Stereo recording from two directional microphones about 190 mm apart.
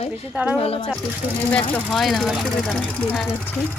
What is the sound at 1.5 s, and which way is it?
Speech, 5° left (ahead or behind).